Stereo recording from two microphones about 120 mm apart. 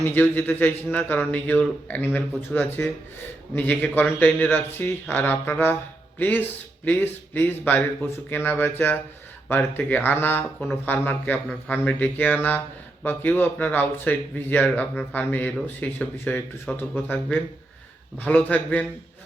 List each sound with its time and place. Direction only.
0.0 s a man's voice: 15° left (ahead or behind)